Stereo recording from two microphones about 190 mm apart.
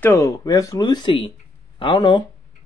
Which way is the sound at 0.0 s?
15° left (ahead or behind).